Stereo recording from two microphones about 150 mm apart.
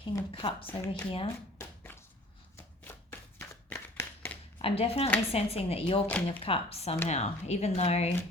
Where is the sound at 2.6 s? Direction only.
15° left (ahead or behind).